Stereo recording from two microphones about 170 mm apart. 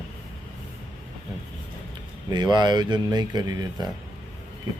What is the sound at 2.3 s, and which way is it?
Speech, 25° right (ahead or behind).